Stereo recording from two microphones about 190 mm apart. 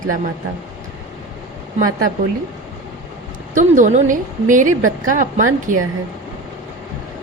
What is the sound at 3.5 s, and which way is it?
A woman's voice, 45° right (ahead or behind).